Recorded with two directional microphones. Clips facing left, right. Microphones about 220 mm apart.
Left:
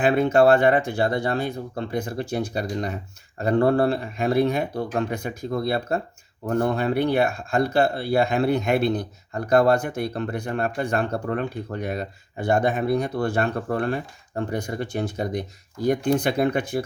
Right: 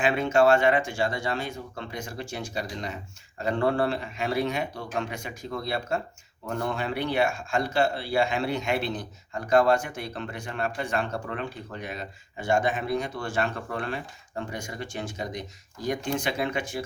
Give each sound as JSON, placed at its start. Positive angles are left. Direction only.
{"t": 0.0, "sound": "speech", "side_deg": 55}
{"t": 1.5, "sound": "speech", "side_deg": 35}
{"t": 2.4, "sound": "speech", "side_deg": 55}
{"t": 4.5, "sound": "speech", "side_deg": 55}
{"t": 11.1, "sound": "speech", "side_deg": 45}
{"t": 13.5, "sound": "speech", "side_deg": 45}